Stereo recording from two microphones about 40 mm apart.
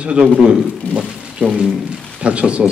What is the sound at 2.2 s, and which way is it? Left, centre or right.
Speech, right.